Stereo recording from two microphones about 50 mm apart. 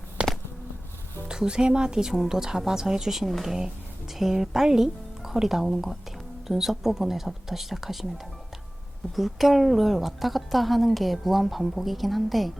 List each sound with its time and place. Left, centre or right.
0.2 s a sound: centre
1.3 s a woman's voice: centre
9.1 s a woman's voice: centre